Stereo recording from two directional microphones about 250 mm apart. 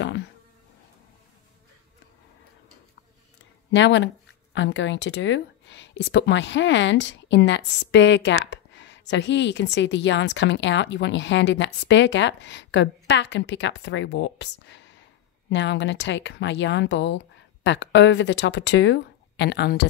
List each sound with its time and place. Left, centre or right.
0.0 s insect: left
3.7 s speech: left